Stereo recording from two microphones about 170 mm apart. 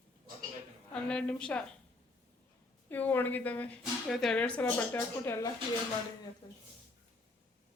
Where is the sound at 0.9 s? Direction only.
5° left (ahead or behind).